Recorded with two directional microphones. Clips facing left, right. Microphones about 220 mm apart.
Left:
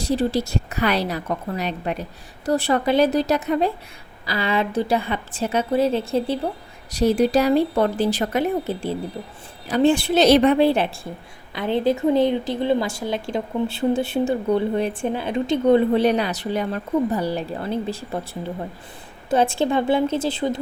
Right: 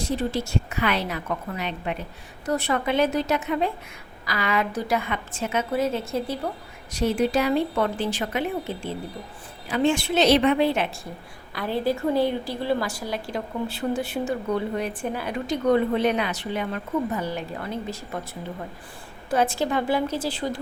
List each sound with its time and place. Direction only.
0.0 s a woman's voice: 35° left (ahead or behind)
11.5 s a woman's voice: 20° left (ahead or behind)
19.3 s a woman's voice: 25° left (ahead or behind)